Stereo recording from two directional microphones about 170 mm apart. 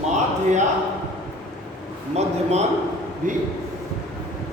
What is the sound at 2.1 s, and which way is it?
A man's voice, 40° right (ahead or behind).